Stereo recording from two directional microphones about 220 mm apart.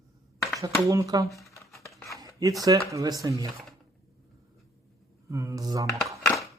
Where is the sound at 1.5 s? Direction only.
15° left (ahead or behind).